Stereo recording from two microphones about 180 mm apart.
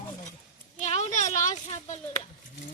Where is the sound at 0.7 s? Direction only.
40° left (ahead or behind).